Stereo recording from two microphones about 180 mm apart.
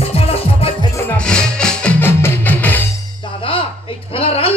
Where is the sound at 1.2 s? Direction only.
5° left (ahead or behind).